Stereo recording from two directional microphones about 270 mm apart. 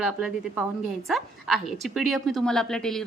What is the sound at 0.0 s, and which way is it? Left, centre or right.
A woman's voice, centre.